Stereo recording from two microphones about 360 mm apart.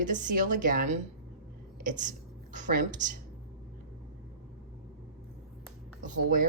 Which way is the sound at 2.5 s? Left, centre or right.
Right.